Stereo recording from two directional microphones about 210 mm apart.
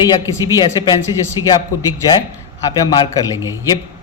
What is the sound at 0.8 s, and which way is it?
Speech, 20° left (ahead or behind).